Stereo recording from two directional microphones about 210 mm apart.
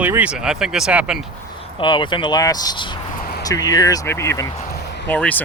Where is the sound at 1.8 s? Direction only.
20° left (ahead or behind).